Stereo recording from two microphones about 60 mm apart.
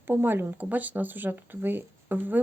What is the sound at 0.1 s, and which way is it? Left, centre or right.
Speech, right.